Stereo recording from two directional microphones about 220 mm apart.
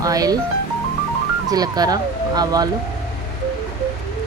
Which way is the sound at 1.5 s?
15° right (ahead or behind).